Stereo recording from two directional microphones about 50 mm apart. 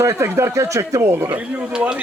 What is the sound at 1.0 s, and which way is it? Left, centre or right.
Speech, right.